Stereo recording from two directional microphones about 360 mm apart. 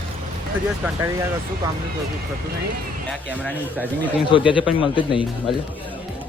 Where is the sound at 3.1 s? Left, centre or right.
Centre.